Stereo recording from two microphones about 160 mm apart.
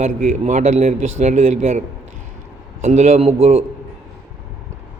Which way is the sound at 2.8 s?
45° right (ahead or behind).